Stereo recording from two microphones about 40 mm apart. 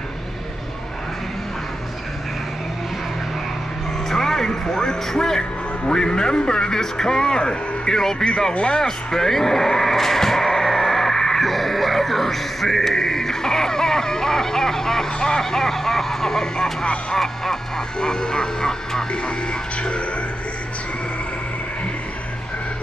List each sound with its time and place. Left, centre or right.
4.1 s music: centre
5.9 s a man's voice: centre
8.7 s a sound: centre
11.4 s a man's voice: centre
19.8 s music: left